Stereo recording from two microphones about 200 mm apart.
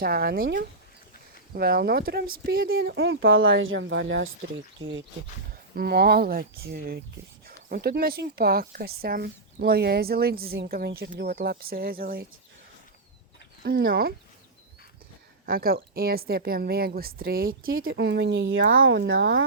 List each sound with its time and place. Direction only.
0.0 s speech: 50° right (ahead or behind)
1.5 s speech: 50° right (ahead or behind); by 4.3 s 65° right (ahead or behind)
5.7 s speech: 50° right (ahead or behind)
13.7 s speech: 45° right (ahead or behind)
15.4 s speech: 45° right (ahead or behind); by 19.5 s 65° right (ahead or behind)